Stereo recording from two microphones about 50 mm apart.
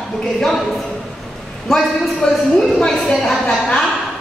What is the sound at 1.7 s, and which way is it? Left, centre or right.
Speech, centre.